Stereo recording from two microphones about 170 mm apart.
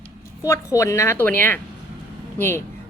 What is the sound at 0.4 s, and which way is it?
A woman's voice, 20° left (ahead or behind).